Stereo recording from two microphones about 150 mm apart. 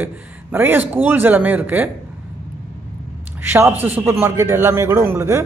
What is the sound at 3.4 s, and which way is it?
A man's voice, 15° right (ahead or behind).